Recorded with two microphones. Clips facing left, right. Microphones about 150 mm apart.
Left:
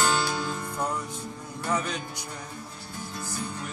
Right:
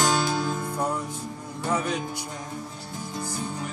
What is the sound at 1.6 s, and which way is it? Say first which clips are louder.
Music: right 3 dB; 10° right (ahead or behind).